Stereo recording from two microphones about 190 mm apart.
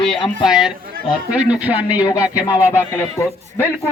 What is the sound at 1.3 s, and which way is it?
Speech, 5° right (ahead or behind).